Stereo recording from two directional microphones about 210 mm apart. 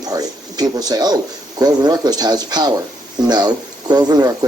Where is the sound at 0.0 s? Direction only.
20° right (ahead or behind).